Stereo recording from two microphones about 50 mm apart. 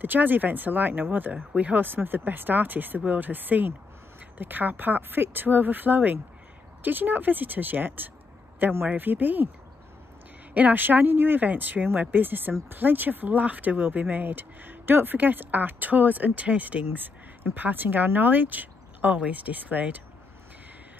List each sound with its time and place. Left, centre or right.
0.0 s speech: right
10.5 s speech: right